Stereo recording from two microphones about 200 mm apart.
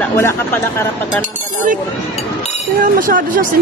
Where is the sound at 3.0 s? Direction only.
40° right (ahead or behind).